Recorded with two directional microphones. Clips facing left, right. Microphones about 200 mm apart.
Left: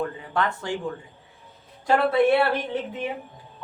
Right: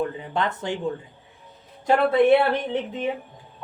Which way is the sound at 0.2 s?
20° right (ahead or behind).